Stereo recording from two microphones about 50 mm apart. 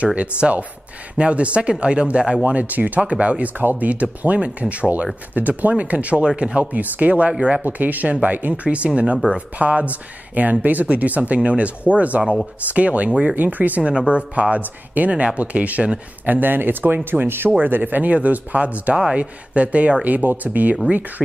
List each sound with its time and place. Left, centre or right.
0.0 s speech: right
2.4 s speech: right
6.7 s speech: right
16.3 s speech: right